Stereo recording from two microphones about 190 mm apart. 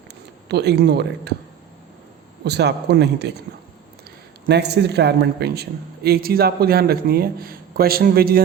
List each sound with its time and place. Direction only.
0.4 s speech: 60° right (ahead or behind)
2.4 s speech: 60° right (ahead or behind)
4.4 s a man's voice: 60° right (ahead or behind)